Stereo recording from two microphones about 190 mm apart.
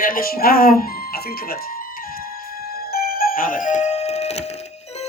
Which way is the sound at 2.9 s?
50° left (ahead or behind).